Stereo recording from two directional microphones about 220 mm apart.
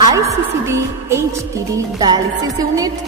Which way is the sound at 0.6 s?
10° right (ahead or behind).